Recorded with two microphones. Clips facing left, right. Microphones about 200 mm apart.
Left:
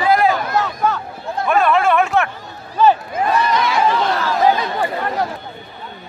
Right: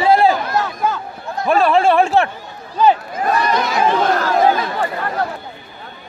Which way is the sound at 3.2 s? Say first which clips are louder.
Right 1 dB; 45° right (ahead or behind).